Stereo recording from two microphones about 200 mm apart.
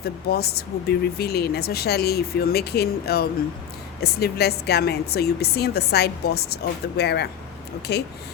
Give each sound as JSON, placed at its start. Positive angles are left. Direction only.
{"t": 0.0, "sound": "speech", "side_deg": 50}